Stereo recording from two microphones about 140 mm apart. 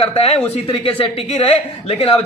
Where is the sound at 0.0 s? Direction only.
45° left (ahead or behind).